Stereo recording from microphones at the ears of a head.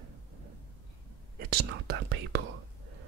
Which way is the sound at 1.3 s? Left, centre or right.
Right.